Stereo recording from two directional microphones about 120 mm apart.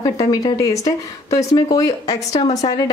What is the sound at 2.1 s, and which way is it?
Speech, 65° left (ahead or behind).